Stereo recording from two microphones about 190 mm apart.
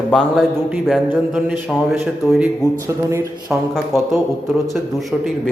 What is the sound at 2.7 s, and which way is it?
Speech, 15° right (ahead or behind).